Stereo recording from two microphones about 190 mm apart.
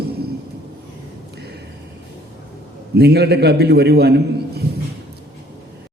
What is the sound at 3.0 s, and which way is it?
A man's voice, 60° right (ahead or behind).